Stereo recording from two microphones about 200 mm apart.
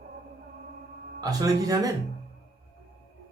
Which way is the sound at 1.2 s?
20° right (ahead or behind).